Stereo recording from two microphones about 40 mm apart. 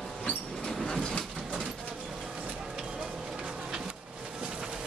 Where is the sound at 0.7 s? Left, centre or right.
Centre.